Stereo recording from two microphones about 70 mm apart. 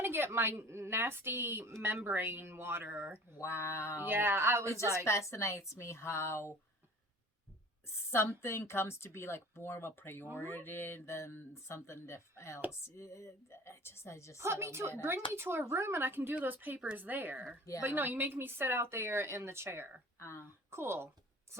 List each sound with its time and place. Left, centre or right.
0.0 s a woman's voice: right
3.4 s speech: left
4.0 s a woman's voice: right
4.7 s a woman's voice: left
8.4 s a woman's voice: left
14.3 s a woman's voice: right
20.1 s speech: left
20.7 s speech: right